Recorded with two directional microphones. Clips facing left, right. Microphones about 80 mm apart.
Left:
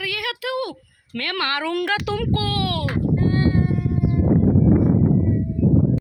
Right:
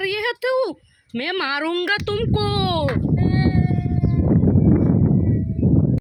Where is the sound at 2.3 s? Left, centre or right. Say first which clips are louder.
Right 3 dB; right.